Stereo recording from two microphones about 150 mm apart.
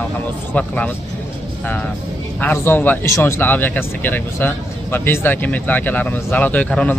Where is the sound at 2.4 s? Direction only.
15° left (ahead or behind).